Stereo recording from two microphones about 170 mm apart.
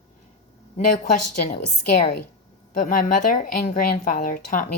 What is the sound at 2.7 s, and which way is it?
A woman's voice, 50° left (ahead or behind).